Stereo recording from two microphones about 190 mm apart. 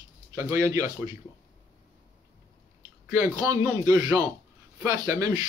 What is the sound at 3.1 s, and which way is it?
A man's voice, 15° right (ahead or behind).